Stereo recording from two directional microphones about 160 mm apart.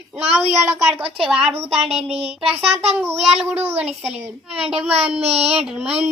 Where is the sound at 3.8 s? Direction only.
5° right (ahead or behind).